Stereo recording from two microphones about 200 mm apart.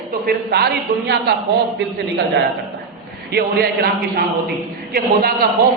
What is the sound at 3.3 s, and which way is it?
Speech, 50° right (ahead or behind).